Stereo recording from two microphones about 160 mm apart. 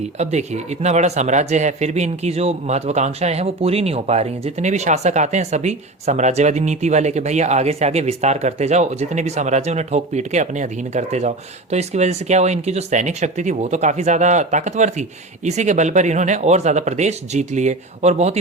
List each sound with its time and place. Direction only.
0.2 s speech: 45° right (ahead or behind)